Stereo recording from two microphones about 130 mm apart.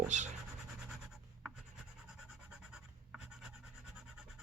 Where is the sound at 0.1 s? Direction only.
65° right (ahead or behind).